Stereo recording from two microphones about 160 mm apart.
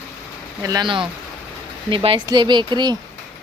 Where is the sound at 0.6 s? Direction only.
25° right (ahead or behind).